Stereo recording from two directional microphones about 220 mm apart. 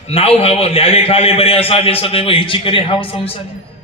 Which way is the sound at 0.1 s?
25° left (ahead or behind).